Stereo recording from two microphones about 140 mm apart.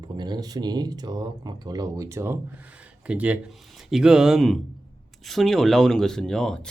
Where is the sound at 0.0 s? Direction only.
30° right (ahead or behind).